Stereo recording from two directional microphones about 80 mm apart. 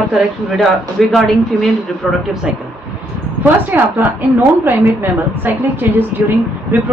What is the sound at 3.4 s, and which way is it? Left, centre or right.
A woman's voice, right.